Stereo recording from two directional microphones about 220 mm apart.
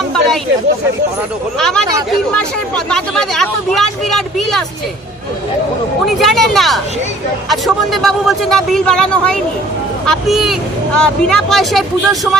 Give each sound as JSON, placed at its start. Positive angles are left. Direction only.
{"t": 1.5, "sound": "speech", "side_deg": 0}
{"t": 6.1, "sound": "speech", "side_deg": 0}